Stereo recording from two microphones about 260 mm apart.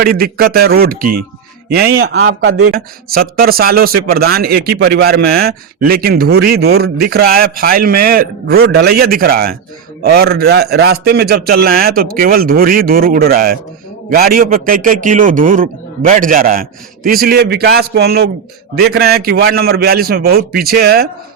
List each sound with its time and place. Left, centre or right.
0.0 s a man's voice: right
2.1 s speech: right
2.7 s a man's voice: right